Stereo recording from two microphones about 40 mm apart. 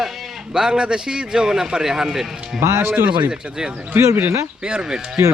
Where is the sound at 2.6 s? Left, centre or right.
Right.